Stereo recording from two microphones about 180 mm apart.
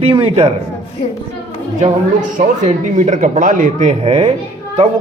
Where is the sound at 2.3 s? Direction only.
40° right (ahead or behind).